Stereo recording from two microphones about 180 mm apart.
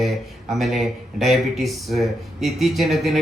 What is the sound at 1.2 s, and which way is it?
Speech, centre (ahead or behind).